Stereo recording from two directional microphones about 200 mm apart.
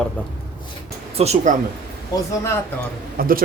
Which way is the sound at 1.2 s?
30° right (ahead or behind).